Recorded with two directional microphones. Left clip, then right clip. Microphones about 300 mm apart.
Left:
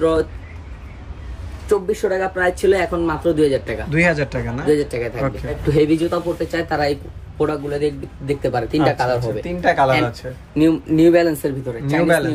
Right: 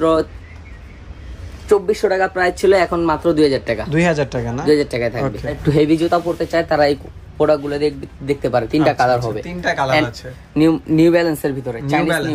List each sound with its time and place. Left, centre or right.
1.7 s speech: right
3.9 s speech: centre
4.6 s speech: right
8.7 s speech: centre
10.5 s a man's voice: right
12.0 s speech: centre